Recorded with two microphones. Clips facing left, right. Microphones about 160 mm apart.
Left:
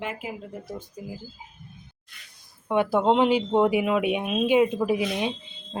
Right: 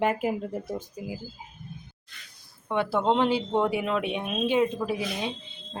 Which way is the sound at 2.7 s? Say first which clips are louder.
Left 3 dB; 15° left (ahead or behind).